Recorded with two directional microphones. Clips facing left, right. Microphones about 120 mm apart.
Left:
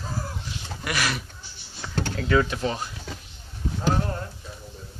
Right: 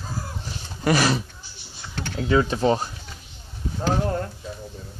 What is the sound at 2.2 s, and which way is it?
Speech, 20° right (ahead or behind).